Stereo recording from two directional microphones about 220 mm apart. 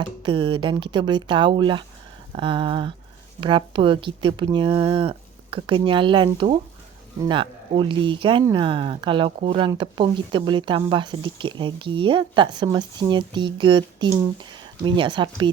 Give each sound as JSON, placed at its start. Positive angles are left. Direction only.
{"t": 0.2, "sound": "speech", "side_deg": -20}